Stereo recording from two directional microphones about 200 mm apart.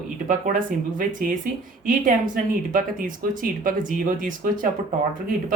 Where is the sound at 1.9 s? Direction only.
40° right (ahead or behind).